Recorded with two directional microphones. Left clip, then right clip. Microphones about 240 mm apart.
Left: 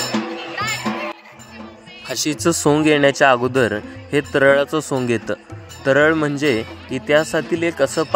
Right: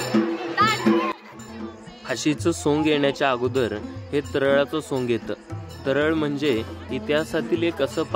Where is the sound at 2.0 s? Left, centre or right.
Left.